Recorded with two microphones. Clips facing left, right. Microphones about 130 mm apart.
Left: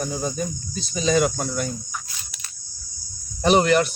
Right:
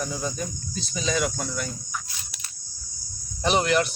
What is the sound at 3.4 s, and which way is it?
Speech, 50° left (ahead or behind).